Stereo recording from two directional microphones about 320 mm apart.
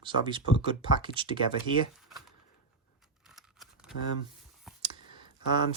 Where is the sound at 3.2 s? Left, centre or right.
Centre.